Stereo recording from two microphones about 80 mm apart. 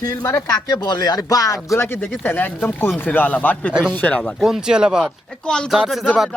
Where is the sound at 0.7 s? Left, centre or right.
Left.